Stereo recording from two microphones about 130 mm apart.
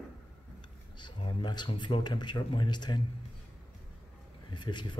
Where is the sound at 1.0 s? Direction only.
35° left (ahead or behind).